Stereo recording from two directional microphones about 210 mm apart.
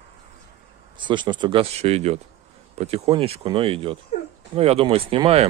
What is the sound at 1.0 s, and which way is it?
Speech, 20° right (ahead or behind).